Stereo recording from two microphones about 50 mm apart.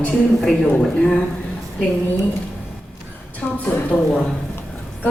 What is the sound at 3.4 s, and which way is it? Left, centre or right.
Speech, left.